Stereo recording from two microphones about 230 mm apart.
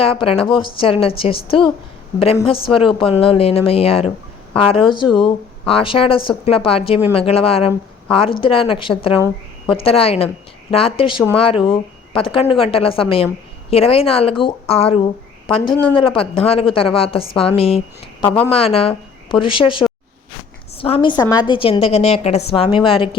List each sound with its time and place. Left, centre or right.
0.0 s a woman's voice: left